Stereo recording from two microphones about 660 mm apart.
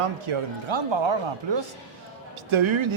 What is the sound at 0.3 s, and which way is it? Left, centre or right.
Speech, right.